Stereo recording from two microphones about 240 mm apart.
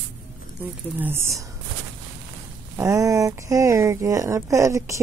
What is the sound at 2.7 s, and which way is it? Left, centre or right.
Speech, centre.